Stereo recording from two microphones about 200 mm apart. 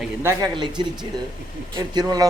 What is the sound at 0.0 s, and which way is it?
Speech, 10° right (ahead or behind).